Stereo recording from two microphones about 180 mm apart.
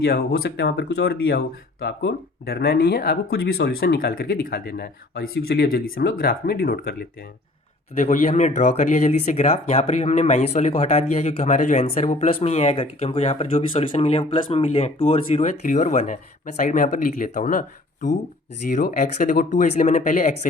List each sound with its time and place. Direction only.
0.0 s speech: 60° left (ahead or behind)
7.9 s speech: 40° left (ahead or behind)